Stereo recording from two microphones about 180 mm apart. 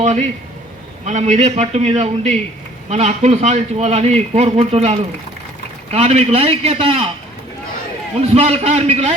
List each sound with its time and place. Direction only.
0.0 s a man's voice: 40° right (ahead or behind)
8.1 s a man's voice: 35° right (ahead or behind)